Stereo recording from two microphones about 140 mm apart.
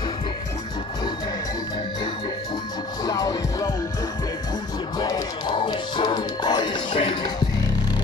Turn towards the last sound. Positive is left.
turn(degrees=35)  # may be behind; listen again after turning